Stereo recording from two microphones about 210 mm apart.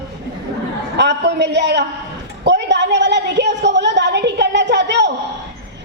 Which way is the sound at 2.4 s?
55° right (ahead or behind).